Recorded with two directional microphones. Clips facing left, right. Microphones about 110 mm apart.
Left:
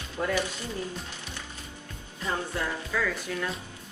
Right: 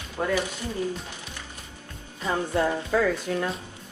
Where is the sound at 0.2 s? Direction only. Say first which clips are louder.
Right 2 dB; 35° right (ahead or behind).